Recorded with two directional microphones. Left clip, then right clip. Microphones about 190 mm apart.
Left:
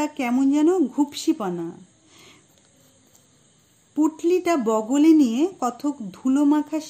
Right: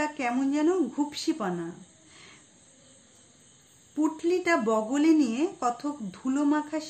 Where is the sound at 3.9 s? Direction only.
40° left (ahead or behind).